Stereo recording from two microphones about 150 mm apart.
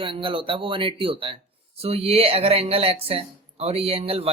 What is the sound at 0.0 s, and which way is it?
Speech, 35° right (ahead or behind).